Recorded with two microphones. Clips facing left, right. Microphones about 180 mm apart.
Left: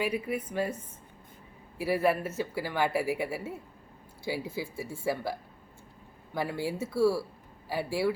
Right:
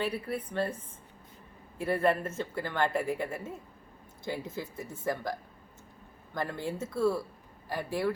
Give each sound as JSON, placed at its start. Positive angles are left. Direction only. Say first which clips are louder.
{"t": 0.0, "sound": "speech", "louder": "left 2 dB", "side_deg": 10}
{"t": 1.8, "sound": "speech", "louder": "left 1 dB", "side_deg": 5}